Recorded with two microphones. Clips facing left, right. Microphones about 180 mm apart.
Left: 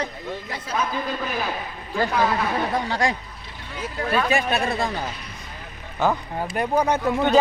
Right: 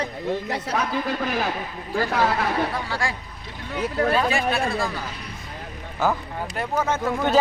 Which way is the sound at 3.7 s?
60° right (ahead or behind).